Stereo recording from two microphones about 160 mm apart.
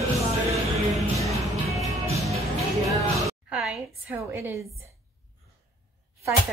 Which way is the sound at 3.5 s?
Centre (ahead or behind).